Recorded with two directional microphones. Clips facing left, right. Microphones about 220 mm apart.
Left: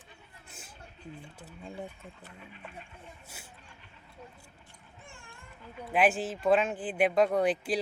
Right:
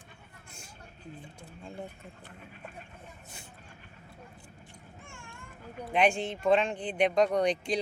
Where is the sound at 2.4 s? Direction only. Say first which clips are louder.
Even; 45° right (ahead or behind).